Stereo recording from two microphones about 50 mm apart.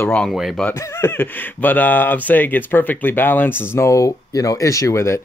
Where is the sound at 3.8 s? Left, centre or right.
Left.